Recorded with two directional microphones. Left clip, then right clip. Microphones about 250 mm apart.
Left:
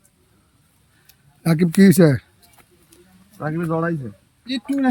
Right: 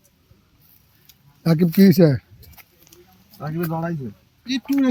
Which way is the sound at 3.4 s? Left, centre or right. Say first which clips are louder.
Left 4 dB; centre.